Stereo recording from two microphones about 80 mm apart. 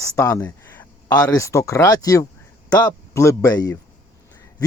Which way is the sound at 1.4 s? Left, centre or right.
Left.